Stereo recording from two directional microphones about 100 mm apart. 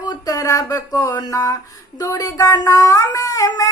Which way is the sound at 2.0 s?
35° left (ahead or behind).